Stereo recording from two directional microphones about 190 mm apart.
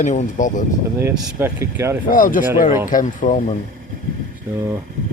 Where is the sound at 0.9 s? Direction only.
10° right (ahead or behind).